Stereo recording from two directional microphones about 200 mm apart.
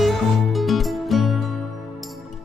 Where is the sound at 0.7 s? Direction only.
Centre (ahead or behind).